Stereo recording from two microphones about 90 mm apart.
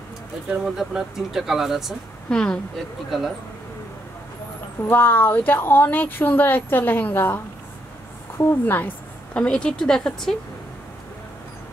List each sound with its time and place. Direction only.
0.7 s speech: 5° right (ahead or behind)
2.2 s a woman's voice: 10° left (ahead or behind)
4.8 s a woman's voice: 20° left (ahead or behind); by 10.3 s 5° left (ahead or behind)